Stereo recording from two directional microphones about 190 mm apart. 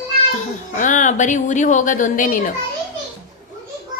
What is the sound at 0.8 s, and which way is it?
Speech, 40° left (ahead or behind).